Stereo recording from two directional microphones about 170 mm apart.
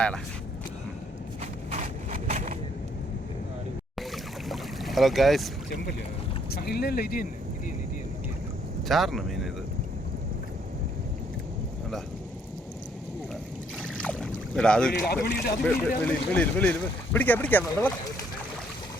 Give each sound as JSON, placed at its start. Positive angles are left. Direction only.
{"t": 1.7, "sound": "a sound", "side_deg": -45}
{"t": 4.1, "sound": "boat", "side_deg": 0}
{"t": 6.5, "sound": "speech", "side_deg": 70}
{"t": 8.9, "sound": "speech", "side_deg": 0}
{"t": 14.0, "sound": "boat", "side_deg": 5}
{"t": 15.0, "sound": "speech", "side_deg": 65}
{"t": 16.0, "sound": "speech", "side_deg": 10}